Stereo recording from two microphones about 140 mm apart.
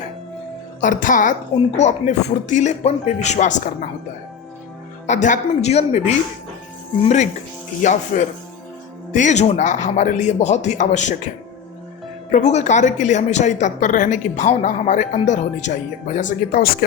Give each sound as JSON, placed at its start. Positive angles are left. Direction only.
{"t": 0.8, "sound": "a woman's voice", "side_deg": 70}
{"t": 5.0, "sound": "a woman's voice", "side_deg": 60}
{"t": 7.8, "sound": "a woman's voice", "side_deg": 60}
{"t": 12.3, "sound": "a woman's voice", "side_deg": 55}
{"t": 16.1, "sound": "speech", "side_deg": 85}